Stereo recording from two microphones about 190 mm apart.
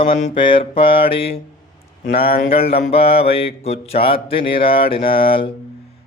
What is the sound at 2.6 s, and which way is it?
Mantra, 30° left (ahead or behind).